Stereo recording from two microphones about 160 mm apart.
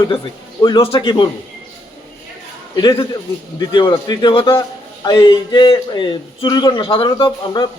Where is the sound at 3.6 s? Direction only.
30° left (ahead or behind).